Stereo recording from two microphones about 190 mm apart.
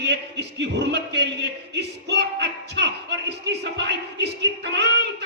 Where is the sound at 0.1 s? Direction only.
65° right (ahead or behind).